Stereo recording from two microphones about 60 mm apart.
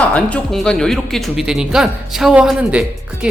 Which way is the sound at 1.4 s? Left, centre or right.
Centre.